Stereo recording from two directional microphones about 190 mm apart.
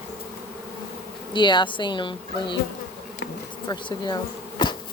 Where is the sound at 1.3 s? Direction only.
25° left (ahead or behind).